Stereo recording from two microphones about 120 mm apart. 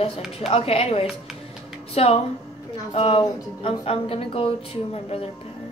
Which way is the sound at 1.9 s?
55° left (ahead or behind).